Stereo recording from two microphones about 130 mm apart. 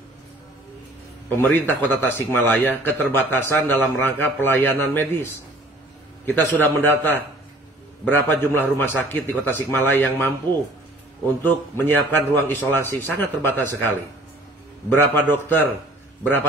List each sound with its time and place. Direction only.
1.5 s a man's voice: 15° left (ahead or behind)
15.0 s a man's voice: 15° left (ahead or behind)